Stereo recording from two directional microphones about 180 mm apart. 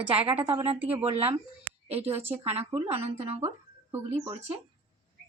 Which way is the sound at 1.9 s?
35° right (ahead or behind).